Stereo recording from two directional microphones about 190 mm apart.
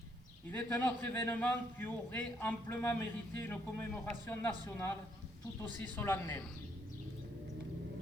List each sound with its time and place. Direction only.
0.5 s a man's voice: 10° left (ahead or behind)
6.0 s a man's voice: 15° left (ahead or behind)